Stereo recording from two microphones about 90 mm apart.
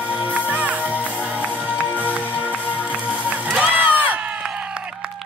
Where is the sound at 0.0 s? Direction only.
15° right (ahead or behind).